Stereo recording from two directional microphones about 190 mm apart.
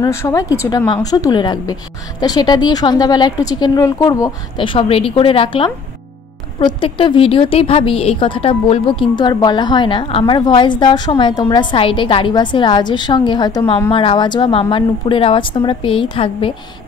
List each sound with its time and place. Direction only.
0.0 s a woman's voice: 15° left (ahead or behind)